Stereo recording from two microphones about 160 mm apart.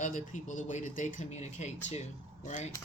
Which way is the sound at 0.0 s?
55° left (ahead or behind).